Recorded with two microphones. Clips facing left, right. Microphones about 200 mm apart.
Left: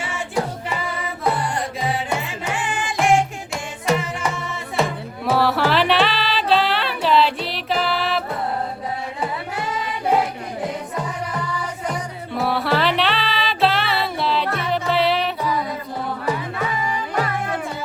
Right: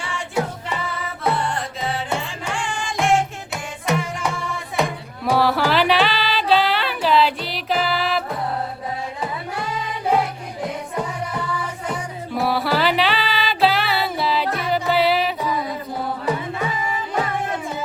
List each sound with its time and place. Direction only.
1.2 s music: centre (ahead or behind)
2.2 s music: 20° left (ahead or behind)
3.0 s music: centre (ahead or behind)
12.4 s music: centre (ahead or behind)